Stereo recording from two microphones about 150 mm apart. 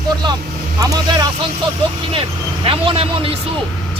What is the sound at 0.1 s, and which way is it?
Vehicle, 30° right (ahead or behind).